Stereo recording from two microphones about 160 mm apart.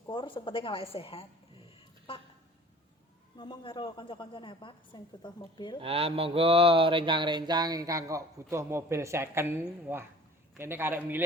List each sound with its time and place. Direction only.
0.1 s a woman's voice: 30° left (ahead or behind)
3.3 s a woman's voice: 30° left (ahead or behind)
5.8 s a man's voice: 35° right (ahead or behind); by 11.2 s 10° right (ahead or behind)